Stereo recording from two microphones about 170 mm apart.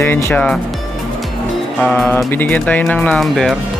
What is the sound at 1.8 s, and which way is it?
Speech, 5° left (ahead or behind).